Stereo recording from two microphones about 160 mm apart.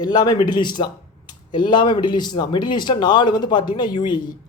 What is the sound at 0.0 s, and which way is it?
Speech, 25° left (ahead or behind).